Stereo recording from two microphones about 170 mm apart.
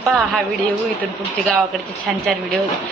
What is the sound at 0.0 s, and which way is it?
Speech, centre (ahead or behind).